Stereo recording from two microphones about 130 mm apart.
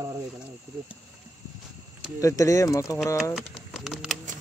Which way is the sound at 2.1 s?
25° left (ahead or behind).